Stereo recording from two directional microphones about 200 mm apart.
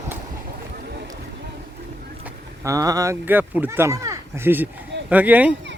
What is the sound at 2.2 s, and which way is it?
Speech, 15° right (ahead or behind).